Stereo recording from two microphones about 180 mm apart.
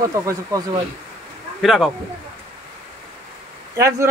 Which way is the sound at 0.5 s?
20° right (ahead or behind).